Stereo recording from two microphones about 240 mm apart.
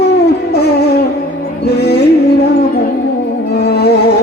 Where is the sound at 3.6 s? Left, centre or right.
Left.